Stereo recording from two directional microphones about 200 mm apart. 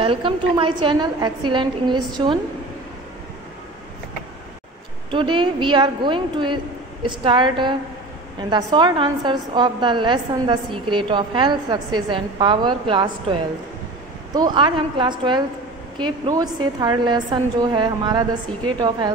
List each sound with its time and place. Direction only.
0.0 s a woman's voice: 25° right (ahead or behind)
5.1 s a woman's voice: 25° right (ahead or behind)